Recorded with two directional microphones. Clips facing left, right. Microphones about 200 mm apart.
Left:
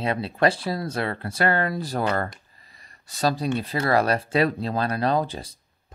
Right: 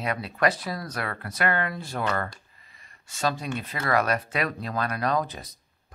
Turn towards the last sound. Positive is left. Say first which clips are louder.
# left 2 dB
turn(degrees=30)  # may be behind; listen again after turning